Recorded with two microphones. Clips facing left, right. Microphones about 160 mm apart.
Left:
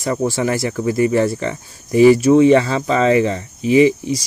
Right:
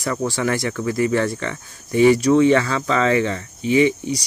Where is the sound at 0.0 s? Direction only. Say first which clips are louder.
Left 3 dB; 25° left (ahead or behind).